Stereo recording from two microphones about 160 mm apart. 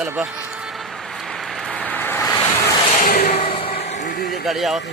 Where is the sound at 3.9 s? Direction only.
55° left (ahead or behind).